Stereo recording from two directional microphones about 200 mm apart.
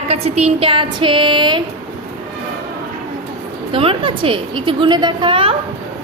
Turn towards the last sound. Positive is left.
turn(degrees=-25)  # may be behind; listen again after turning